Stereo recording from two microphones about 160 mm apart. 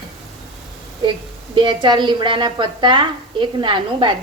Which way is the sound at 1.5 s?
30° right (ahead or behind).